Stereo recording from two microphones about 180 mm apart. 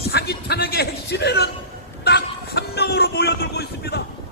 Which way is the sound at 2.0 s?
65° left (ahead or behind).